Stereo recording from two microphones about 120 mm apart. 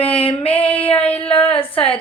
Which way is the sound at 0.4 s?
50° left (ahead or behind).